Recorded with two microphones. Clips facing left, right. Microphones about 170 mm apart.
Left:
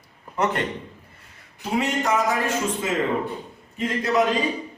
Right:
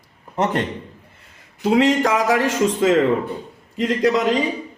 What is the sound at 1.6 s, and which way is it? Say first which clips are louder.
A man's voice: right 8 dB; 90° right.